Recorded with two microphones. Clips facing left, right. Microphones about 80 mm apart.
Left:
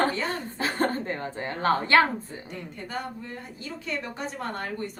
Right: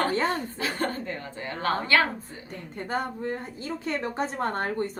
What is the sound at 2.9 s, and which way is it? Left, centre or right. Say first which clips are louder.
A woman's voice: right 7 dB; right.